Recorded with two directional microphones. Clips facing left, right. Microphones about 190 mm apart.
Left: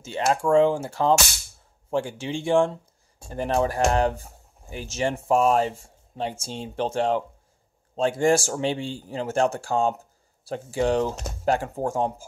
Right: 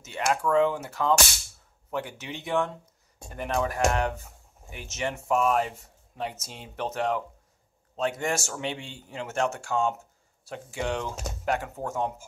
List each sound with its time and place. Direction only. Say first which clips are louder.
0.0 s speech: left 4 dB; 30° left (ahead or behind)